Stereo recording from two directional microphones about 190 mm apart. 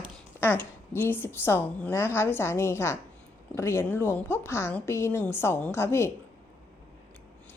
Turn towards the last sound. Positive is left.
turn(degrees=15)  # may be behind; listen again after turning